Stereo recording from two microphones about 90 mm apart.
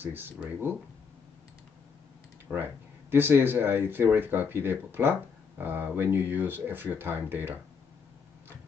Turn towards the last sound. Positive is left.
turn(degrees=-25)  # may be behind; listen again after turning